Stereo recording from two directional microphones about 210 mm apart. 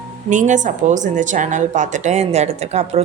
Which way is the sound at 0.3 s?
35° right (ahead or behind).